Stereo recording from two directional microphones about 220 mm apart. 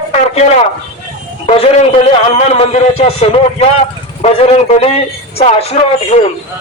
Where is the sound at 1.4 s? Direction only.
30° left (ahead or behind).